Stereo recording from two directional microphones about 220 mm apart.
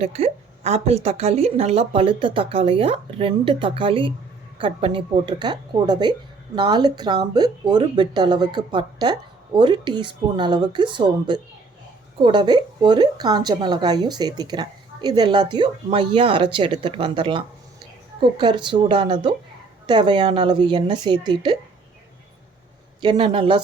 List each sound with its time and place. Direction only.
0.0 s a woman's voice: 30° right (ahead or behind)
23.0 s a woman's voice: 20° right (ahead or behind)